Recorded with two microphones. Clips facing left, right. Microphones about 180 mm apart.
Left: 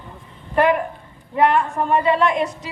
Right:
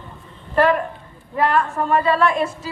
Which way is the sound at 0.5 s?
15° left (ahead or behind).